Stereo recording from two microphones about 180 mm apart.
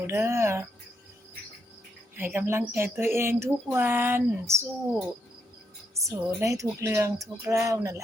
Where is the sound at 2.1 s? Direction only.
10° right (ahead or behind).